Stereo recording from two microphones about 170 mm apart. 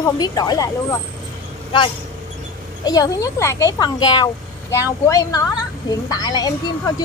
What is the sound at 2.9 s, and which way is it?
A woman's voice, 20° left (ahead or behind).